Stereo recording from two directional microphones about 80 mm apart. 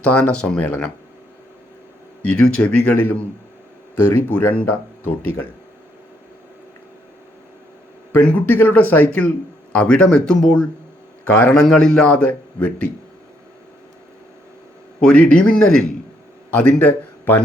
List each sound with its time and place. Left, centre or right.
0.0 s speech: centre
2.2 s speech: centre
8.1 s speech: left
10.4 s speech: centre
15.0 s speech: centre
16.5 s a man's voice: centre